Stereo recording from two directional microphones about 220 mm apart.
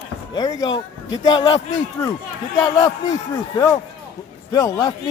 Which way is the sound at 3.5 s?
15° left (ahead or behind).